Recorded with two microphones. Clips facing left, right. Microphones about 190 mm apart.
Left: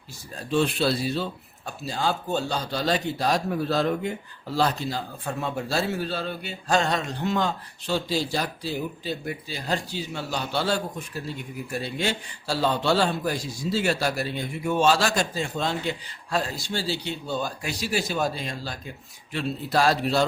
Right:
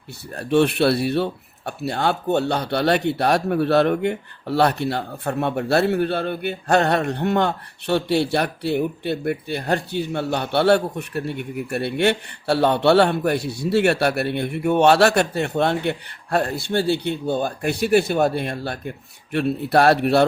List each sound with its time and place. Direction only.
0.3 s speech: 65° right (ahead or behind)